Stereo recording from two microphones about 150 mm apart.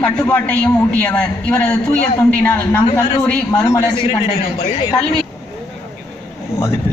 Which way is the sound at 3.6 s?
25° left (ahead or behind).